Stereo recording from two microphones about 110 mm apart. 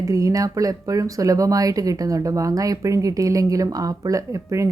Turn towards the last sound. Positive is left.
turn(degrees=-30)  # may be behind; listen again after turning